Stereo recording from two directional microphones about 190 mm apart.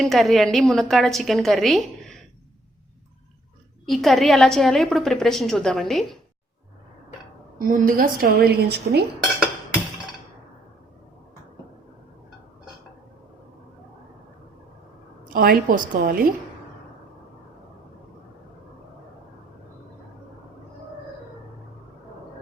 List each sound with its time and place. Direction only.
0.0 s a woman's voice: centre (ahead or behind)
3.8 s a woman's voice: centre (ahead or behind)
7.7 s a woman's voice: 45° right (ahead or behind)
15.3 s a woman's voice: 50° right (ahead or behind)